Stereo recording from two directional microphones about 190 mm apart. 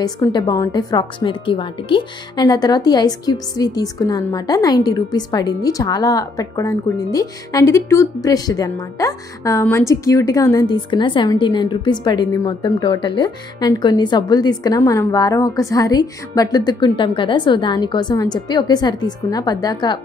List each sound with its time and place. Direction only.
0.0 s a woman's voice: 20° left (ahead or behind)